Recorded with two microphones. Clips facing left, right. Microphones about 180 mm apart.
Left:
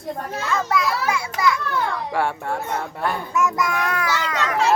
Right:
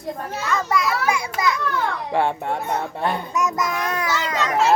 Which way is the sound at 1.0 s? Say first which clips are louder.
Even; 15° right (ahead or behind).